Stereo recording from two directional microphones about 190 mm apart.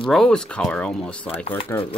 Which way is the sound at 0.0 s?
Centre (ahead or behind).